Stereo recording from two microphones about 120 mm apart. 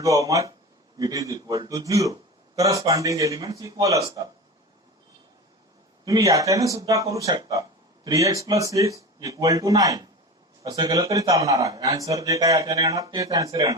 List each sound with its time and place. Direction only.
0.0 s a man's voice: 30° right (ahead or behind)
6.1 s a man's voice: 25° right (ahead or behind)